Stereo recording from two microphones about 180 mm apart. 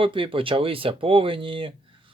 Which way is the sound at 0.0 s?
30° right (ahead or behind).